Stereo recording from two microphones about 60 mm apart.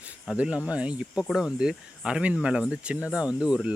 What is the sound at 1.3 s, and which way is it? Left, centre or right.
Speech, centre.